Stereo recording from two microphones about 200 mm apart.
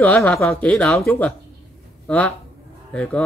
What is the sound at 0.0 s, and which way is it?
A man's voice, 5° left (ahead or behind).